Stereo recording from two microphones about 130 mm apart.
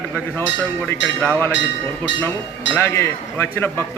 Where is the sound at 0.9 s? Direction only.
15° left (ahead or behind).